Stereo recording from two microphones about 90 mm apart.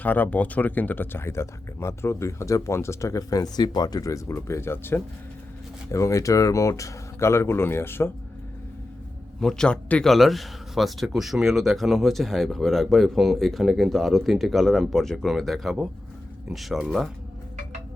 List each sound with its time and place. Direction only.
0.0 s speech: 20° left (ahead or behind)
5.9 s speech: 35° left (ahead or behind)
9.4 s a man's voice: 5° left (ahead or behind)